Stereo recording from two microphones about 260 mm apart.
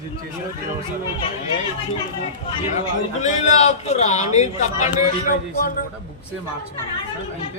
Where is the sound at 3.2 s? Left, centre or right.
Left.